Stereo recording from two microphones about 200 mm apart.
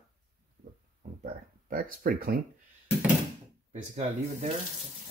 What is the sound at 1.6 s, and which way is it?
Speech, 45° right (ahead or behind).